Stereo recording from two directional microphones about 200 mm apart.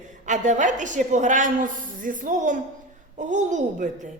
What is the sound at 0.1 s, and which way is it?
A woman's voice, 40° right (ahead or behind).